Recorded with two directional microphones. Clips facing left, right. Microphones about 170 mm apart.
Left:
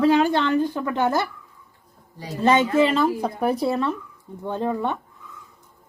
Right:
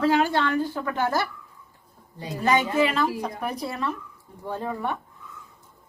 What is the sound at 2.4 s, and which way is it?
Speech, 25° left (ahead or behind).